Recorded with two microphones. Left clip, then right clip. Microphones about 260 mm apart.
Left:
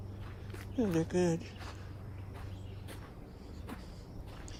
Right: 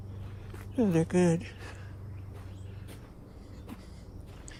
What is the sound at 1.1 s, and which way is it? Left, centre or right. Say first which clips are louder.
Speech: right 5 dB; centre.